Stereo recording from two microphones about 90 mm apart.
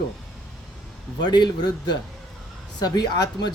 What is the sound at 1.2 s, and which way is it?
A woman's voice, 50° left (ahead or behind).